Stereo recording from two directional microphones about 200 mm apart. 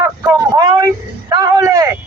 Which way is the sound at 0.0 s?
15° right (ahead or behind).